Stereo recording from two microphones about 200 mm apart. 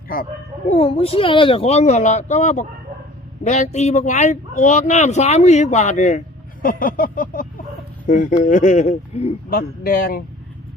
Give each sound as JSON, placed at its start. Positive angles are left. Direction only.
{"t": 0.1, "sound": "a child's voice", "side_deg": 45}
{"t": 0.7, "sound": "speech", "side_deg": 30}
{"t": 9.5, "sound": "a man's voice", "side_deg": 45}